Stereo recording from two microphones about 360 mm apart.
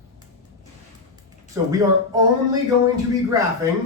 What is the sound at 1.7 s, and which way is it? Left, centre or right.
Speech, centre.